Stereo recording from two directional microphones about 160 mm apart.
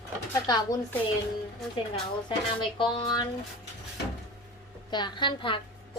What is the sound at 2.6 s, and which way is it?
Speech, 30° left (ahead or behind).